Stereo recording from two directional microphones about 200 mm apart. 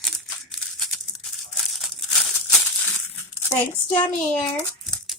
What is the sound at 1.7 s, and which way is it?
Crumpling, centre (ahead or behind).